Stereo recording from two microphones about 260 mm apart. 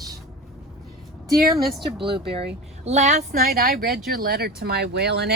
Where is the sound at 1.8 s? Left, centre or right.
Centre.